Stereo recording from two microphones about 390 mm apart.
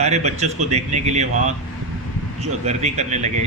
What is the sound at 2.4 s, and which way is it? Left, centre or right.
Speech, centre.